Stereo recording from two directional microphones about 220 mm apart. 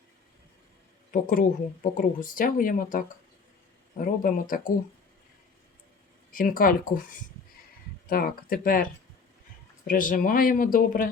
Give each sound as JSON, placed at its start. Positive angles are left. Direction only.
{"t": 1.1, "sound": "speech", "side_deg": 40}
{"t": 4.0, "sound": "speech", "side_deg": 40}
{"t": 6.3, "sound": "speech", "side_deg": 40}
{"t": 8.1, "sound": "speech", "side_deg": 40}